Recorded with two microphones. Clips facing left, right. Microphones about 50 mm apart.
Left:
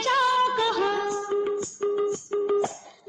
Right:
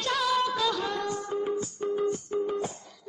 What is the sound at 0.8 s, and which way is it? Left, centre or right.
Music, left.